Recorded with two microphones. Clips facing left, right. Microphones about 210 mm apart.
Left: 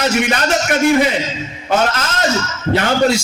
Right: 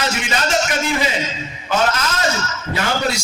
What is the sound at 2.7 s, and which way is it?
Speech, 45° left (ahead or behind).